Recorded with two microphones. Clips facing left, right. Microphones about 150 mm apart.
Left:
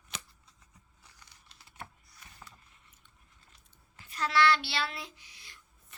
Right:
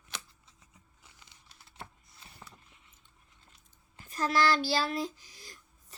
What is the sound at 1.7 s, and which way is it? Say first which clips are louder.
Computer keyboard: left 1 dB; 25° right (ahead or behind).